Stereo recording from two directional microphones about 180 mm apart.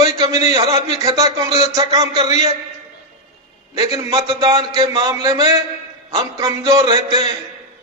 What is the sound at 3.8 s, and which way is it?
A man's voice, 20° right (ahead or behind).